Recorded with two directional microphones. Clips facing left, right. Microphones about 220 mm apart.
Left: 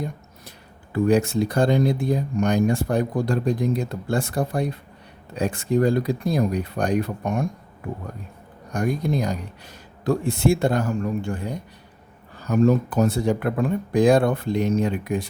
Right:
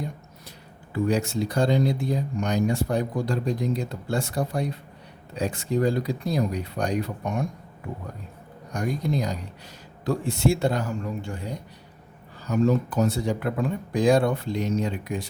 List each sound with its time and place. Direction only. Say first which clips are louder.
0.9 s speech: left 5 dB; 55° left (ahead or behind)
8.7 s speech: left 3 dB; 55° left (ahead or behind)